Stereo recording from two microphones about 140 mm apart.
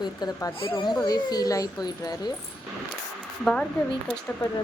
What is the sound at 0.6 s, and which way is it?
Speech, 35° left (ahead or behind).